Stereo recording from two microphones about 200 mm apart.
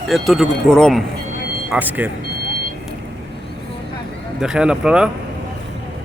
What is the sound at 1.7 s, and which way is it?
Speech, 10° right (ahead or behind).